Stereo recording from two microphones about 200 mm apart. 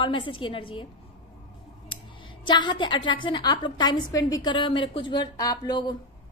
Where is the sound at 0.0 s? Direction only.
25° left (ahead or behind).